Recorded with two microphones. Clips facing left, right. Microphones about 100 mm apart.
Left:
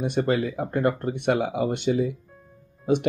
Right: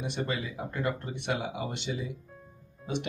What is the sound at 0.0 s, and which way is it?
Speech, 50° left (ahead or behind).